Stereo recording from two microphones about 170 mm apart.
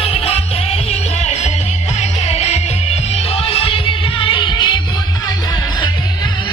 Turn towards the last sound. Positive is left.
turn(degrees=30)  # may be behind; listen again after turning